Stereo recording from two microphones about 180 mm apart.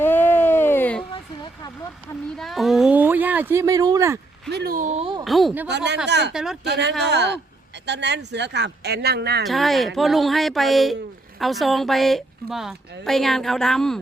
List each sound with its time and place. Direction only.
0.0 s a sound: 10° left (ahead or behind)
2.4 s a sound: centre (ahead or behind); by 4.2 s 15° right (ahead or behind)
4.4 s speech: 65° right (ahead or behind); by 5.2 s 35° right (ahead or behind)
5.2 s speech: centre (ahead or behind)
5.6 s speech: 70° right (ahead or behind)
6.3 s speech: centre (ahead or behind)
6.7 s speech: 70° right (ahead or behind)
9.5 s speech: centre (ahead or behind)